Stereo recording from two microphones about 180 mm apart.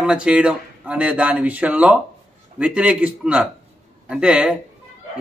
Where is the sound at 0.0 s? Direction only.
5° right (ahead or behind).